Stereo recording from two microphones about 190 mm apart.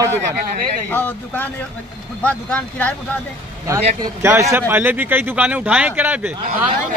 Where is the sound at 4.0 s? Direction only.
15° right (ahead or behind).